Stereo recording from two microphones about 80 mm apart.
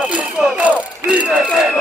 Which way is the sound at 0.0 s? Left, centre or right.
Centre.